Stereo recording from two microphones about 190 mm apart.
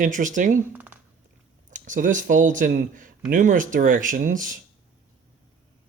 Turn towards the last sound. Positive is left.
turn(degrees=-45)  # may be behind; listen again after turning